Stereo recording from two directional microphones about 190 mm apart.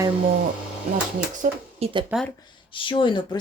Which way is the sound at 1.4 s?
30° right (ahead or behind).